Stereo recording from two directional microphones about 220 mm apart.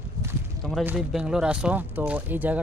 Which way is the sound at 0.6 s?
5° right (ahead or behind).